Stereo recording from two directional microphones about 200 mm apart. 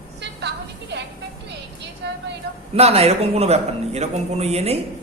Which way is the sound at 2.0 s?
60° right (ahead or behind).